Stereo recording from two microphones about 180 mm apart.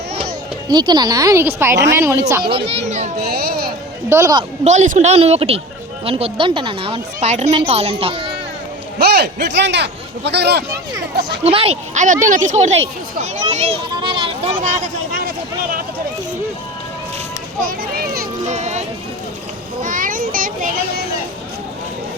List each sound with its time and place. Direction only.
0.7 s speech: 25° right (ahead or behind)
2.9 s speech: 40° right (ahead or behind)
3.3 s speech: 60° right (ahead or behind)
4.1 s a woman's voice: 20° right (ahead or behind)
4.6 s speech: 40° right (ahead or behind)
9.6 s speech: 75° right (ahead or behind)
11.4 s speech: 35° right (ahead or behind)
13.9 s children playing: 25° right (ahead or behind)
14.6 s speech: 45° right (ahead or behind)
17.6 s speech: 55° right (ahead or behind)
18.5 s a child's voice: 40° right (ahead or behind); by 21.1 s 55° right (ahead or behind)